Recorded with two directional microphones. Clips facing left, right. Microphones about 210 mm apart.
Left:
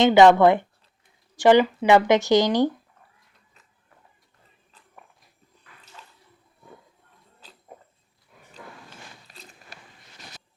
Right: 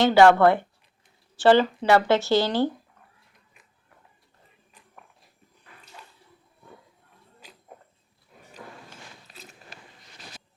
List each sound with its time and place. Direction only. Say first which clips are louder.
0.0 s speech: left 2 dB; 20° left (ahead or behind)